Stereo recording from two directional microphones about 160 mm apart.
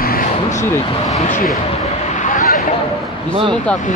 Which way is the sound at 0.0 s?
65° left (ahead or behind).